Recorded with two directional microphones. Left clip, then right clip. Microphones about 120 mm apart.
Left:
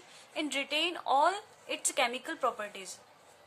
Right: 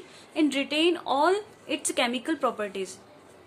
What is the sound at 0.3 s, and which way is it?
A woman's voice, 25° left (ahead or behind).